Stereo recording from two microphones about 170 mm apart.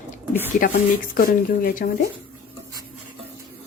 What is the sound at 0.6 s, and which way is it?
A woman's voice, 55° left (ahead or behind).